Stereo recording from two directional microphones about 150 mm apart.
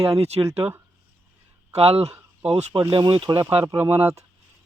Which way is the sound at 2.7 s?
30° right (ahead or behind).